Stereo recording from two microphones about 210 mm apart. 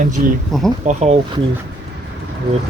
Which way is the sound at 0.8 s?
30° right (ahead or behind).